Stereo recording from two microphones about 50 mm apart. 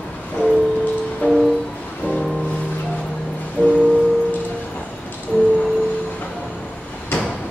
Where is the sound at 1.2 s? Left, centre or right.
Left.